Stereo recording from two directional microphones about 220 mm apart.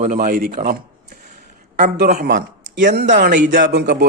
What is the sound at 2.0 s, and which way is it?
A man's voice, 45° right (ahead or behind).